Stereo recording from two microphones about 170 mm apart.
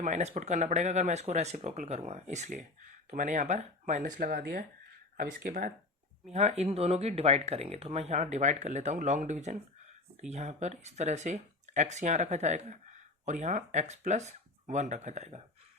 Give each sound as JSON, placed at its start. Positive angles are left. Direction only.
{"t": 0.0, "sound": "speech", "side_deg": -45}
{"t": 6.3, "sound": "speech", "side_deg": -40}